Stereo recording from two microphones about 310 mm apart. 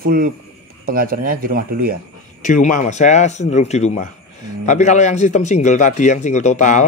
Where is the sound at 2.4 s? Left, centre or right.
Left.